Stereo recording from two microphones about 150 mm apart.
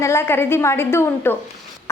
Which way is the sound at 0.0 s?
15° left (ahead or behind).